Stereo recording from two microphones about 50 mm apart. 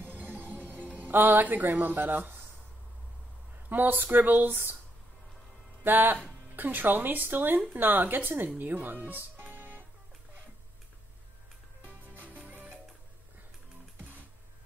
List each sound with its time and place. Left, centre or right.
0.0 s music: right
0.9 s speech: right
3.6 s speech: right
5.9 s speech: right
8.5 s music: right
12.4 s music: right